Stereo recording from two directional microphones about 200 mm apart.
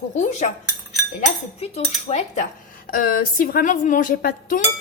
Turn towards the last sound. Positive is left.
turn(degrees=45)  # may be behind; listen again after turning